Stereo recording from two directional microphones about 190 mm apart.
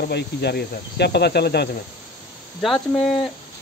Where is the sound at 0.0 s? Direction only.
60° left (ahead or behind).